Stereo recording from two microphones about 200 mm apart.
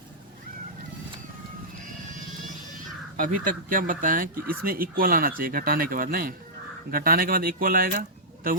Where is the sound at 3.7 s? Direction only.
45° right (ahead or behind).